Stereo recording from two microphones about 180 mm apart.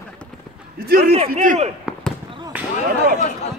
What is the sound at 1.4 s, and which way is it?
Speech, 45° right (ahead or behind).